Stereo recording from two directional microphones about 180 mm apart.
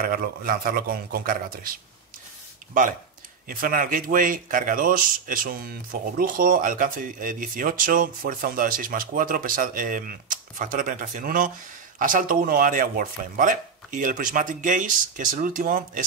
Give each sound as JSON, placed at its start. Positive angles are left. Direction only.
{"t": 0.0, "sound": "speech", "side_deg": -55}
{"t": 3.4, "sound": "speech", "side_deg": -50}